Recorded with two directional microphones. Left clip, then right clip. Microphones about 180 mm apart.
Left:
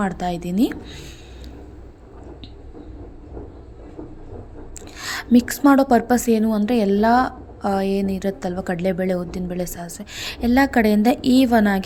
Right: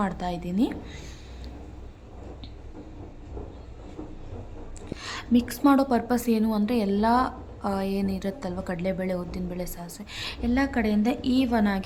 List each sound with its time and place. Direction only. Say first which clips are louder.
0.0 s a woman's voice: left 5 dB; 20° left (ahead or behind)
4.9 s a woman's voice: left 7 dB; 30° left (ahead or behind)